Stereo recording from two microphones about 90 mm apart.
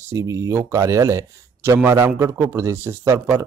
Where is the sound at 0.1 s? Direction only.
35° right (ahead or behind).